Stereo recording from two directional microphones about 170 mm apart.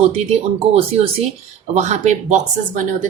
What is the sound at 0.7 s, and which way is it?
Speech, 35° right (ahead or behind).